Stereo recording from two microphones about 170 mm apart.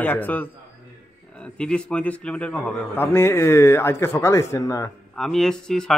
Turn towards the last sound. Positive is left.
turn(degrees=5)  # may be behind; listen again after turning